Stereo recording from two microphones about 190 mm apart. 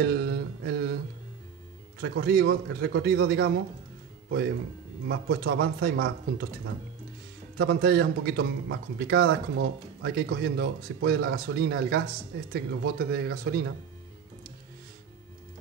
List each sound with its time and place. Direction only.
0.0 s mantra: 60° right (ahead or behind)
2.0 s a man's voice: 65° right (ahead or behind)
5.0 s a man's voice: 60° right (ahead or behind)
7.5 s a man's voice: 60° right (ahead or behind)